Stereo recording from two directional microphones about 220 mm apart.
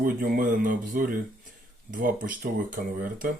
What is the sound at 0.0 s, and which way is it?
Speech, 40° right (ahead or behind).